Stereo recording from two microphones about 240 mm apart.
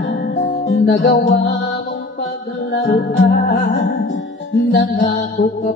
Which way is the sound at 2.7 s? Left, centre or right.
Left.